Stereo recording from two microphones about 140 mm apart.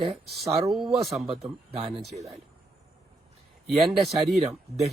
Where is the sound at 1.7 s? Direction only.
50° right (ahead or behind).